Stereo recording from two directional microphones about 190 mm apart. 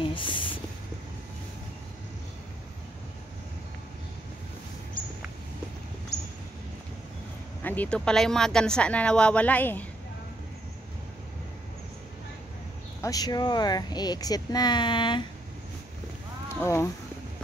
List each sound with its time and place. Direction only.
0.0 s a sound: 25° left (ahead or behind)
7.6 s speech: 10° left (ahead or behind)
13.0 s speech: 20° left (ahead or behind)
16.4 s speech: 15° left (ahead or behind)